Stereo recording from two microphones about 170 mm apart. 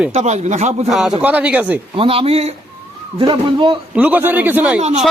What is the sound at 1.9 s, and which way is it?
A man's voice, 35° right (ahead or behind).